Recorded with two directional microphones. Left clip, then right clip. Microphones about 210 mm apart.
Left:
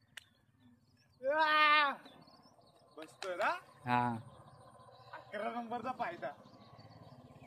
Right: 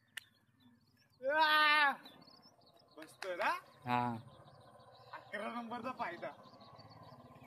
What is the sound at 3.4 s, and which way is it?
Speech, 45° right (ahead or behind).